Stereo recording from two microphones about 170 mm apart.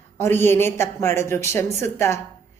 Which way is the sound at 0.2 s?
15° left (ahead or behind).